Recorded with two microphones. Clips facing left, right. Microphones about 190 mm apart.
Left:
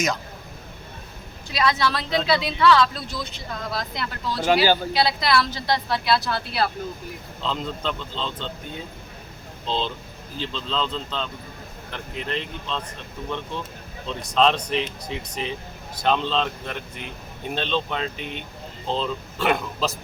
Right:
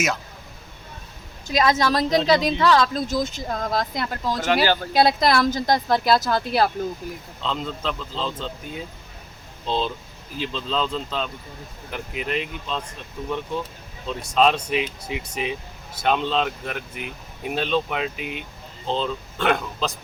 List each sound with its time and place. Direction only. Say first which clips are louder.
1.5 s a woman's voice: right 3 dB; 45° right (ahead or behind)
4.6 s speech: left 1 dB; 10° left (ahead or behind)
4.9 s a woman's voice: right 4 dB; 50° right (ahead or behind)
7.4 s speech: even; centre (ahead or behind)
9.6 s speech: right 2 dB; 10° right (ahead or behind)
14.1 s speech: right 1 dB; 10° right (ahead or behind)